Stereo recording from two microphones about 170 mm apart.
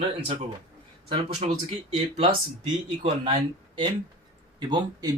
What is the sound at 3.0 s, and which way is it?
Speech, 30° right (ahead or behind).